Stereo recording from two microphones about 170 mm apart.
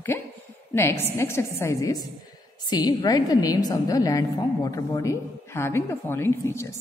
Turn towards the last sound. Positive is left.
turn(degrees=15)  # may be behind; listen again after turning